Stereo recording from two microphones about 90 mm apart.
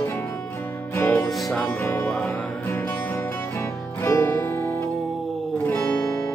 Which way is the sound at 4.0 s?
30° left (ahead or behind).